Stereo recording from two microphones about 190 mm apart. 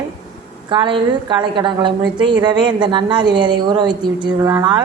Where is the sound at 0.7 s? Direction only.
25° right (ahead or behind).